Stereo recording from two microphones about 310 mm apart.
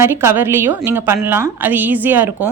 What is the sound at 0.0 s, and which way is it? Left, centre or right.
A woman's voice, centre.